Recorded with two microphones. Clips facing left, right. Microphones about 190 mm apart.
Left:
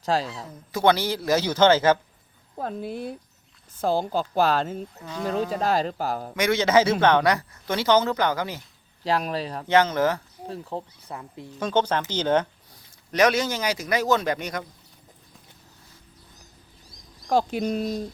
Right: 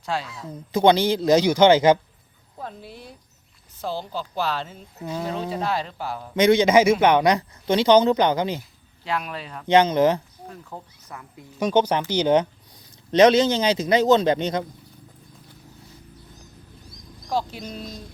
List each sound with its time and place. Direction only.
0.0 s speech: 40° left (ahead or behind)
0.7 s speech: 20° right (ahead or behind)
2.6 s speech: 50° left (ahead or behind)
6.3 s speech: 20° right (ahead or behind)
9.0 s speech: 35° left (ahead or behind)
9.6 s speech: 15° right (ahead or behind)
10.4 s speech: 30° left (ahead or behind)
11.6 s speech: 10° right (ahead or behind)
17.2 s speech: 55° left (ahead or behind)